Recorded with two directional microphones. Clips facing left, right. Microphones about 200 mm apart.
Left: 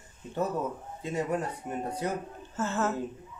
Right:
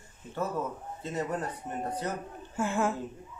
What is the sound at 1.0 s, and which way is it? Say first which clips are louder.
Speech: left 3 dB; 10° left (ahead or behind).